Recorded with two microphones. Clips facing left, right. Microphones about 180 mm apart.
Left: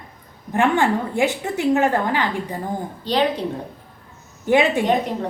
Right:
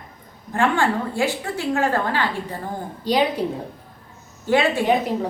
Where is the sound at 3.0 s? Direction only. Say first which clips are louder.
Even; 10° right (ahead or behind).